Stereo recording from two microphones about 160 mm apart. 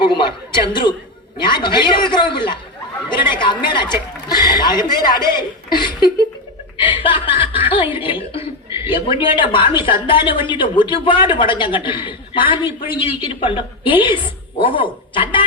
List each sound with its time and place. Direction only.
0.0 s a woman's voice: 30° left (ahead or behind)